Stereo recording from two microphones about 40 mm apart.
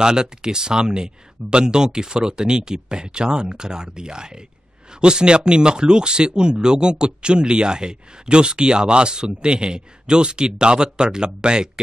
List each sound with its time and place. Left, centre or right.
0.0 s speech: centre